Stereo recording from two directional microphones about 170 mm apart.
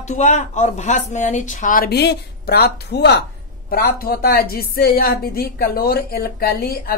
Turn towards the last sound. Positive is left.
turn(degrees=65)  # may be behind; listen again after turning